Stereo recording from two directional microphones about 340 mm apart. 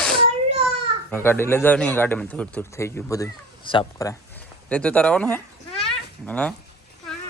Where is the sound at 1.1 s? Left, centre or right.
Centre.